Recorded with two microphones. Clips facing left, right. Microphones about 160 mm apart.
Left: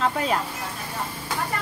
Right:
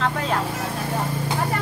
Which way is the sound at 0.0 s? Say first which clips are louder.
Even; 10° left (ahead or behind).